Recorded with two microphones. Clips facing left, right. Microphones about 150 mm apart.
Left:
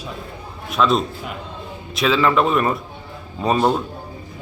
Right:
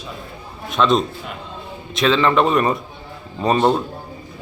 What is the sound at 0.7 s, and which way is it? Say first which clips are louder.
A man's voice: right 1 dB; centre (ahead or behind).